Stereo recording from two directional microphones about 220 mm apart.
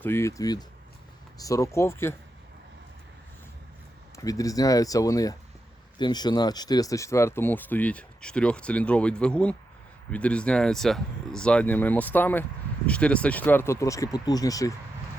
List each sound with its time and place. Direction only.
0.0 s speech: 10° left (ahead or behind)
4.2 s speech: 15° left (ahead or behind)